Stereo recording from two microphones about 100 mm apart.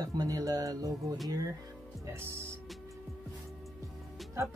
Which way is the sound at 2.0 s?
25° right (ahead or behind).